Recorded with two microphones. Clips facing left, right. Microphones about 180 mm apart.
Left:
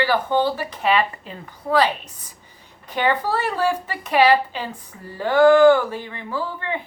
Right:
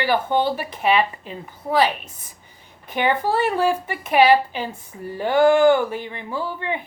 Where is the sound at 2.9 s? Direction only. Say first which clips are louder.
Right 1 dB; 15° right (ahead or behind).